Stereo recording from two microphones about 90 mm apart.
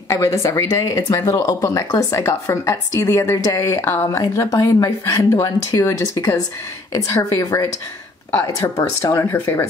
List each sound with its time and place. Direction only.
0.1 s a woman's voice: 35° left (ahead or behind)